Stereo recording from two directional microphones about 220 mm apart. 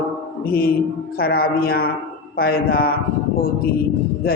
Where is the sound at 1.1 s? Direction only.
45° left (ahead or behind).